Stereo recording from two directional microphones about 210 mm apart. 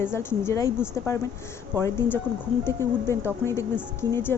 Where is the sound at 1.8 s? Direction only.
10° left (ahead or behind).